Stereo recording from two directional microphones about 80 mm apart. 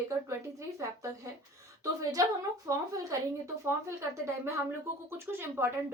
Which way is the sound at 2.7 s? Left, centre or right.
Right.